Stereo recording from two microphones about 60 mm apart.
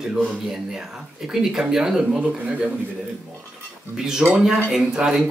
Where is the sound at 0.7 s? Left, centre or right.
Centre.